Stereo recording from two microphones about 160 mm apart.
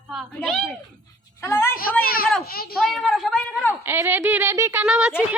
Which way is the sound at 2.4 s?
70° left (ahead or behind).